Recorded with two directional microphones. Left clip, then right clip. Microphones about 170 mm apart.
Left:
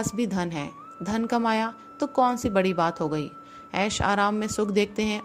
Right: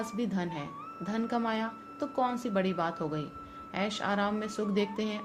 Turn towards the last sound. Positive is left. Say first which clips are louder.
# left 7 dB
turn(degrees=45)  # may be behind; listen again after turning